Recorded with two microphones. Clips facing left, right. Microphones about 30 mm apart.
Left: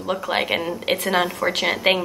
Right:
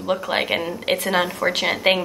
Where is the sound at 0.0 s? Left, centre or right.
Centre.